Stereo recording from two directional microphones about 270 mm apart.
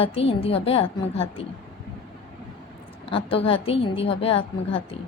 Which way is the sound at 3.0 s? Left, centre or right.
Centre.